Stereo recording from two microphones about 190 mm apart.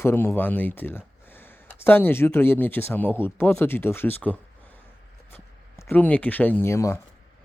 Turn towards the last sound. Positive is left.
turn(degrees=15)  # may be behind; listen again after turning